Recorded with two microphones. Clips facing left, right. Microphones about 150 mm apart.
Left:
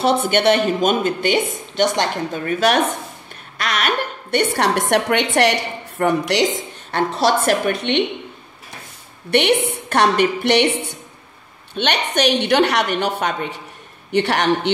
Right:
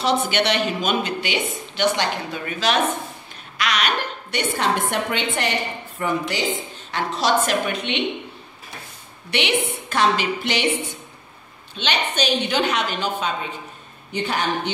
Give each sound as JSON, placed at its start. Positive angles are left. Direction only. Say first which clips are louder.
{"t": 0.0, "sound": "a woman's voice", "louder": "left 5 dB", "side_deg": 55}
{"t": 2.6, "sound": "a woman's voice", "louder": "left 3 dB", "side_deg": 60}
{"t": 3.5, "sound": "a woman's voice", "louder": "left 2 dB", "side_deg": 50}
{"t": 7.0, "sound": "a woman's voice", "louder": "left 3 dB", "side_deg": 55}
{"t": 9.3, "sound": "a woman's voice", "louder": "left 6 dB", "side_deg": 65}